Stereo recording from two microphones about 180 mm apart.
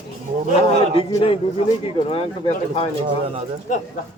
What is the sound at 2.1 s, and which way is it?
Speech, 30° left (ahead or behind).